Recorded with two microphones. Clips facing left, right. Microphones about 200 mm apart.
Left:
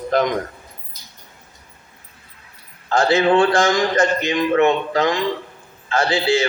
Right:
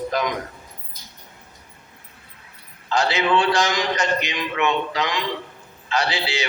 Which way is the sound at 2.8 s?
50° left (ahead or behind).